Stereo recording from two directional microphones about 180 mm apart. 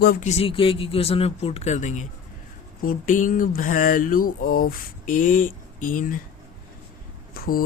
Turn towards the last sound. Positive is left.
turn(degrees=55)  # may be behind; listen again after turning